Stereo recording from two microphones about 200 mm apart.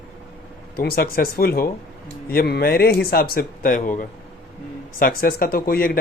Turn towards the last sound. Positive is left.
turn(degrees=45)  # may be behind; listen again after turning